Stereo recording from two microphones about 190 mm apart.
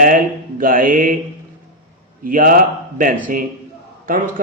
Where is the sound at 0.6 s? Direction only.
45° right (ahead or behind).